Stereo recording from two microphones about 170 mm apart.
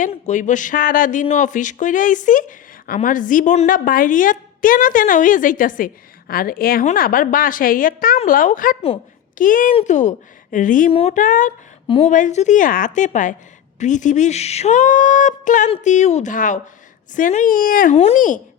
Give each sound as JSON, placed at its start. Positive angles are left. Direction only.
{"t": 0.0, "sound": "a woman's voice", "side_deg": 45}
{"t": 11.9, "sound": "a woman's voice", "side_deg": 35}
{"t": 12.1, "sound": "a woman's voice", "side_deg": 45}
{"t": 17.9, "sound": "a child's voice", "side_deg": 35}